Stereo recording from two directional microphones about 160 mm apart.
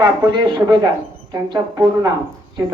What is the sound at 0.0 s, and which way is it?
Speech, 25° right (ahead or behind).